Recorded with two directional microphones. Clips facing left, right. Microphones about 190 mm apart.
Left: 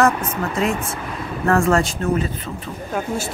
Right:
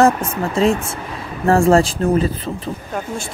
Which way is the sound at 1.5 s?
30° right (ahead or behind).